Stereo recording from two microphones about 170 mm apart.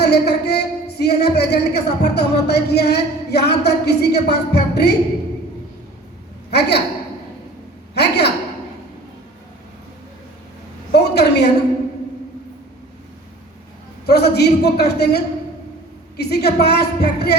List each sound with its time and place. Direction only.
0.0 s speech: 75° left (ahead or behind)
6.5 s speech: 80° left
7.9 s speech: 80° left
10.9 s a woman's voice: 80° left
14.1 s speech: 75° left (ahead or behind)